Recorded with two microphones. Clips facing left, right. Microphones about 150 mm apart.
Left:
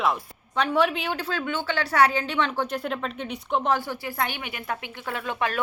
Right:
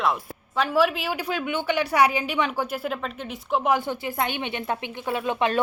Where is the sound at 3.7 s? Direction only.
20° right (ahead or behind).